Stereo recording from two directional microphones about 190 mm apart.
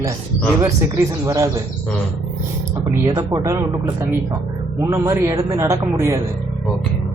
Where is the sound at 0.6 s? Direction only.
15° right (ahead or behind).